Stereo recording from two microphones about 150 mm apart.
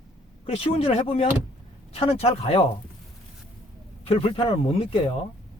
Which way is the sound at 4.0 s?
40° left (ahead or behind).